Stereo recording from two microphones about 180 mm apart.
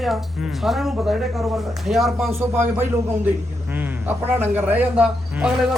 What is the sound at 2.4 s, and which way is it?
Speech, 15° right (ahead or behind).